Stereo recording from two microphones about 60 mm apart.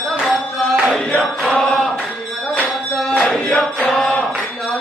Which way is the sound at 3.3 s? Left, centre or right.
Centre.